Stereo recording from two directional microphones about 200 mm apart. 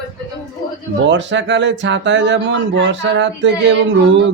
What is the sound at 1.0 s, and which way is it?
Speech, 65° right (ahead or behind).